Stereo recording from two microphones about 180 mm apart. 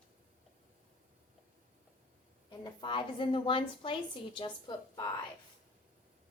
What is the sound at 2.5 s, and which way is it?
A woman's voice, 25° left (ahead or behind).